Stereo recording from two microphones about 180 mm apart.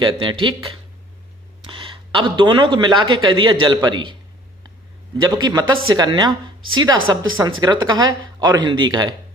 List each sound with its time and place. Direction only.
0.0 s speech: 25° right (ahead or behind)
1.6 s speech: 30° right (ahead or behind)
5.4 s speech: 20° right (ahead or behind)